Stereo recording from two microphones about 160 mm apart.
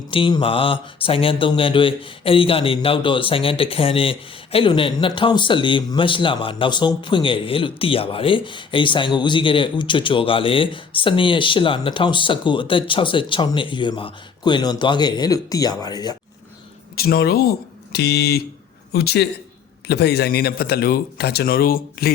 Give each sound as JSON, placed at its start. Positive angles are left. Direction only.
{"t": 0.1, "sound": "speech", "side_deg": 30}
{"t": 16.9, "sound": "speech", "side_deg": 75}
{"t": 18.9, "sound": "a man's voice", "side_deg": 80}
{"t": 19.9, "sound": "a man's voice", "side_deg": 90}